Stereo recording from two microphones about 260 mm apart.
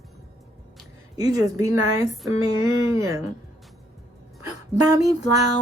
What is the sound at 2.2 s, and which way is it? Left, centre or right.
Speech, centre.